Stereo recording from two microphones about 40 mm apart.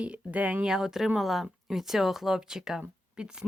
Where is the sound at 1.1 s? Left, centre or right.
Centre.